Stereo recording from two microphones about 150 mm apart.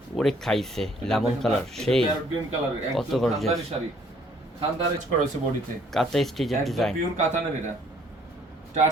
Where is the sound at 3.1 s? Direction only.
Centre (ahead or behind).